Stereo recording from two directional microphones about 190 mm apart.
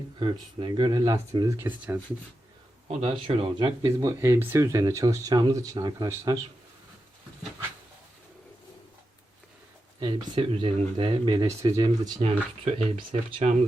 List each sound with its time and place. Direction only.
0.2 s speech: 25° right (ahead or behind)
2.8 s speech: 35° right (ahead or behind)
3.8 s speech: 15° right (ahead or behind)
10.0 s speech: 25° right (ahead or behind)
12.6 s speech: 35° right (ahead or behind)